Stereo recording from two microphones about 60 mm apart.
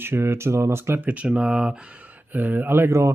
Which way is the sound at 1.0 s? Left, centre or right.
Right.